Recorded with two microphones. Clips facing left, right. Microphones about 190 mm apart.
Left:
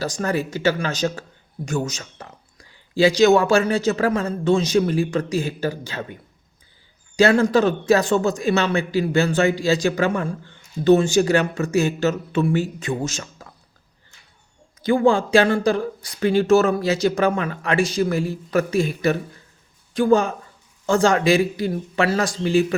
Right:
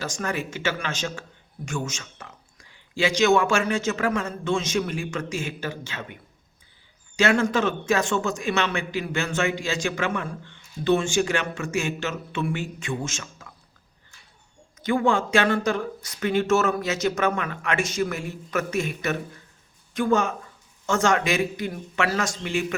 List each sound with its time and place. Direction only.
0.0 s a man's voice: 35° left (ahead or behind)
7.2 s a man's voice: 35° left (ahead or behind)
14.8 s a man's voice: 35° left (ahead or behind)